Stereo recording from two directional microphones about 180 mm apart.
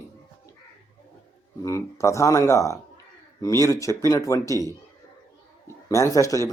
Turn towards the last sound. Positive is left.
turn(degrees=20)  # may be behind; listen again after turning